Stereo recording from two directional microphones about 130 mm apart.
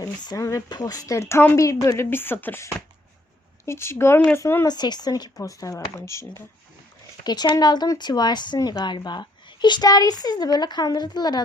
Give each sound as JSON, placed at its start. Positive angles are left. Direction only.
{"t": 0.3, "sound": "a woman's voice", "side_deg": 25}
{"t": 3.7, "sound": "a woman's voice", "side_deg": 20}
{"t": 4.7, "sound": "a woman's voice", "side_deg": 35}